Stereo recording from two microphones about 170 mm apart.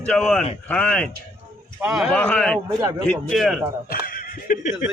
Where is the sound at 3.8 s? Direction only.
60° left (ahead or behind).